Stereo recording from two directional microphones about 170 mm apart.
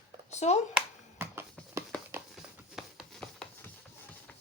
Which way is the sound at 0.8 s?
15° right (ahead or behind).